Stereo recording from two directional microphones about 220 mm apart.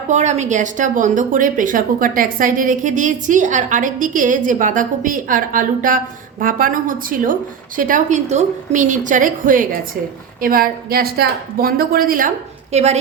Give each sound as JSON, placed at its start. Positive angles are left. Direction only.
{"t": 0.1, "sound": "speech", "side_deg": -30}
{"t": 12.7, "sound": "a woman's voice", "side_deg": -30}